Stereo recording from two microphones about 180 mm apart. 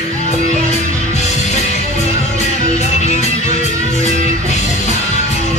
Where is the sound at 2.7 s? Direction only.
40° left (ahead or behind).